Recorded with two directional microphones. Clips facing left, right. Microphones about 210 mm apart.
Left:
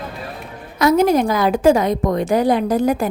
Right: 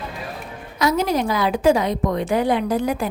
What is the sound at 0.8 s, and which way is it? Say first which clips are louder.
A woman's voice: left 6 dB; 50° left (ahead or behind).